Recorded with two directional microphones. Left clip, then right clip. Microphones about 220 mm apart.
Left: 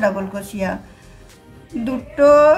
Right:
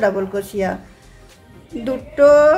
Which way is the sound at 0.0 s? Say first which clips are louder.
Right 2 dB; 20° right (ahead or behind).